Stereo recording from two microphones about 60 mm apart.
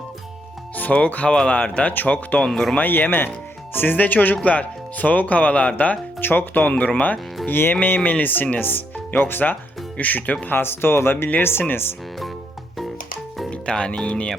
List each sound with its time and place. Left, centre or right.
0.8 s speech: left
2.5 s speech: centre
2.7 s speech: left
10.4 s speech: left
13.5 s speech: centre